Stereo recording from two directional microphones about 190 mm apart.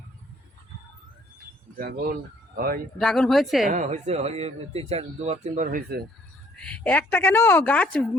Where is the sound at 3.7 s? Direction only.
40° right (ahead or behind).